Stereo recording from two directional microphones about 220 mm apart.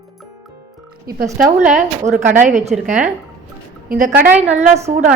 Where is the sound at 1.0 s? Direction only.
40° right (ahead or behind).